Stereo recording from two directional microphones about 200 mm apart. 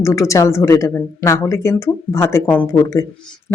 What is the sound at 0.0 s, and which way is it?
A woman's voice, 15° left (ahead or behind).